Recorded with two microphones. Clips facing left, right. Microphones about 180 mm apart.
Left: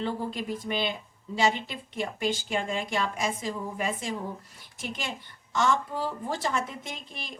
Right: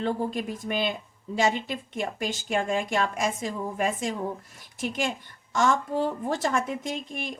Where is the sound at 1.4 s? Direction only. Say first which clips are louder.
Right 1 dB; 45° right (ahead or behind).